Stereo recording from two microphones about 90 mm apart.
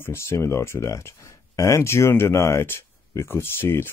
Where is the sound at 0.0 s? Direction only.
30° left (ahead or behind).